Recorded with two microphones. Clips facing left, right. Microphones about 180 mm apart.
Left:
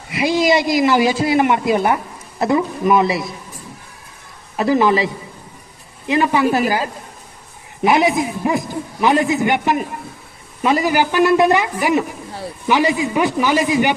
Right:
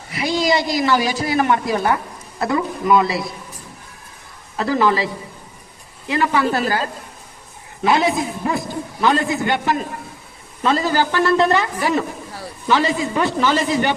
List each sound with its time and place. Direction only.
0.1 s speech: 20° left (ahead or behind)
4.5 s a man's voice: 20° left (ahead or behind)